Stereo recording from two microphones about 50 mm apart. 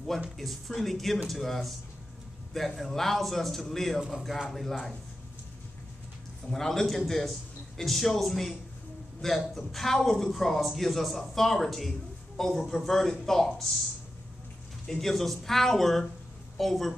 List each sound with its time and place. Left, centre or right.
0.4 s a man's voice: centre
6.5 s a man's voice: centre
14.9 s a man's voice: centre